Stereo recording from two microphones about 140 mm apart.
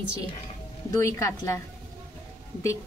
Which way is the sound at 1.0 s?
20° left (ahead or behind).